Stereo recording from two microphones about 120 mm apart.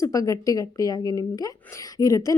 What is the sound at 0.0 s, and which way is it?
Speech, 25° left (ahead or behind).